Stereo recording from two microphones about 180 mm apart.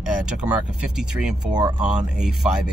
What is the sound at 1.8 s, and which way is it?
Speech, 5° right (ahead or behind).